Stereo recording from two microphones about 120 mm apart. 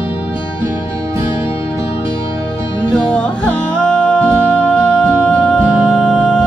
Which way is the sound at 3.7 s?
10° left (ahead or behind).